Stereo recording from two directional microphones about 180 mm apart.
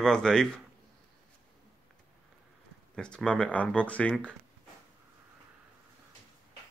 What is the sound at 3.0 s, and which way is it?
Speech, 5° left (ahead or behind).